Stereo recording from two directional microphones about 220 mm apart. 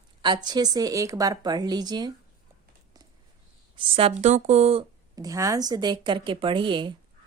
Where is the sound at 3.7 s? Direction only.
25° right (ahead or behind).